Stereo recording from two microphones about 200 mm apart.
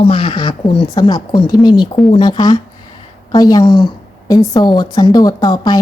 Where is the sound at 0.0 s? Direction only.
25° left (ahead or behind).